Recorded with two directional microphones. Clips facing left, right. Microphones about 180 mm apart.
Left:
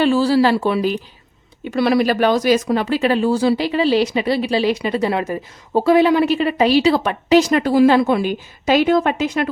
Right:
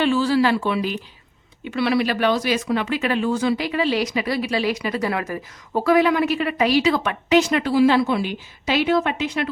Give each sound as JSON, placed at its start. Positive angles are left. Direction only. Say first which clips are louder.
{"t": 0.0, "sound": "speech", "louder": "left 4 dB", "side_deg": 35}